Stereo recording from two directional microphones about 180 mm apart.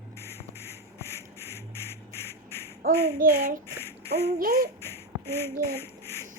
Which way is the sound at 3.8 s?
15° left (ahead or behind).